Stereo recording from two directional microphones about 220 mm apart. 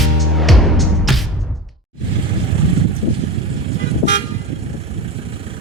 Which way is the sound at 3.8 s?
55° left (ahead or behind).